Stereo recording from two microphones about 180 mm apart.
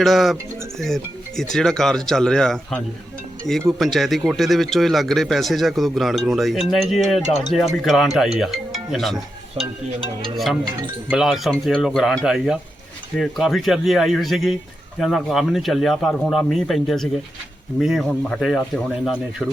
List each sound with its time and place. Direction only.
0.0 s a man's voice: centre (ahead or behind)
9.6 s speech: 30° right (ahead or behind)
10.3 s a man's voice: centre (ahead or behind)